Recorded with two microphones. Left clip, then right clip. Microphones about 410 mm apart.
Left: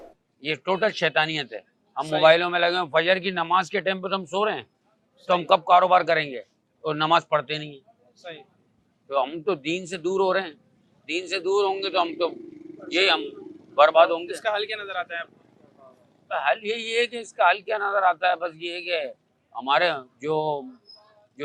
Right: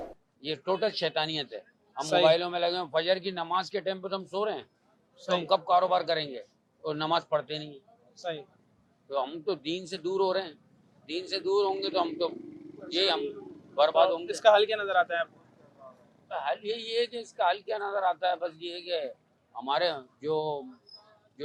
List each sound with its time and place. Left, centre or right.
0.3 s a man's voice: left
8.1 s speech: right
9.0 s a man's voice: left
14.4 s speech: right
16.3 s a man's voice: left